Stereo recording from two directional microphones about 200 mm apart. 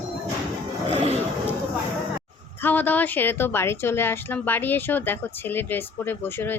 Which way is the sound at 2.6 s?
10° left (ahead or behind).